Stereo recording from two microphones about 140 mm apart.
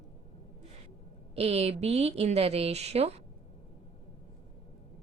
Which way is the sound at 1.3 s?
45° right (ahead or behind).